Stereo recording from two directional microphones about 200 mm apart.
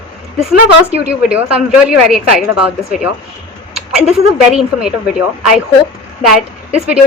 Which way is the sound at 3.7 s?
Centre (ahead or behind).